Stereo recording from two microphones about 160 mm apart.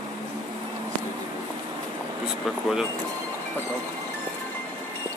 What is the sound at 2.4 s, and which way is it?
Speech, 5° right (ahead or behind).